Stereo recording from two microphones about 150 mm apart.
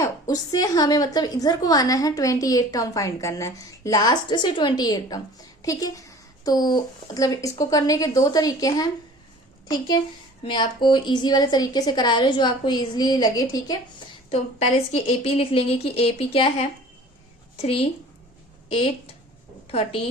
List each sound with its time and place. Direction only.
0.0 s a woman's voice: 25° left (ahead or behind)
14.3 s a woman's voice: 45° left (ahead or behind)